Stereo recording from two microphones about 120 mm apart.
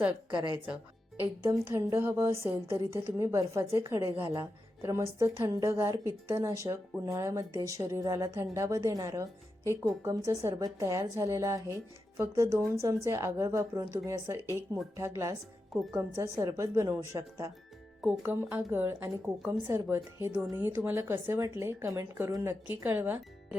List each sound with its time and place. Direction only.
0.3 s a woman's voice: 40° right (ahead or behind)
1.5 s a woman's voice: 25° right (ahead or behind)
18.0 s a woman's voice: 15° right (ahead or behind)